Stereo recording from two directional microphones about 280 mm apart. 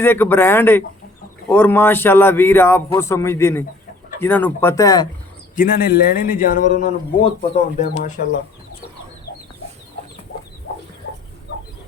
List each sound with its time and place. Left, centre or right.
0.0 s a man's voice: centre
5.5 s a man's voice: left